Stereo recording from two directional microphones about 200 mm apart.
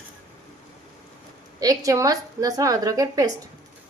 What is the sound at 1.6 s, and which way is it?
Speech, 15° right (ahead or behind).